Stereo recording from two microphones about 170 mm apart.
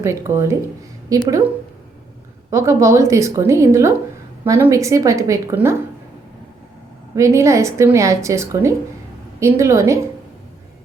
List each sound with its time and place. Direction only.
0.0 s a woman's voice: 15° right (ahead or behind)
2.5 s a woman's voice: 15° right (ahead or behind)
7.2 s a woman's voice: 15° right (ahead or behind)